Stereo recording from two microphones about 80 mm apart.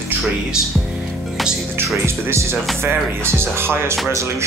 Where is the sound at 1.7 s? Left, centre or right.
Right.